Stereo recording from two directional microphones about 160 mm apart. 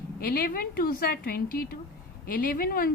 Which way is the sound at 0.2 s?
70° left (ahead or behind).